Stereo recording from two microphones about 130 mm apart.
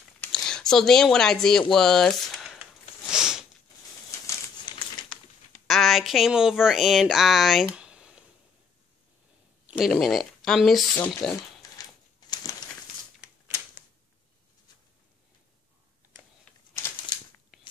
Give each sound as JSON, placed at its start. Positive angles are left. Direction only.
{"t": 0.3, "sound": "a sound", "side_deg": 5}
{"t": 5.7, "sound": "speech", "side_deg": 0}
{"t": 9.7, "sound": "speech", "side_deg": 0}
{"t": 11.8, "sound": "typewriter", "side_deg": 30}
{"t": 16.5, "sound": "crumpling", "side_deg": 10}